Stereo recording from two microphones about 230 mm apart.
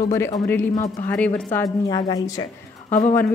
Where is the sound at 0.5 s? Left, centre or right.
Centre.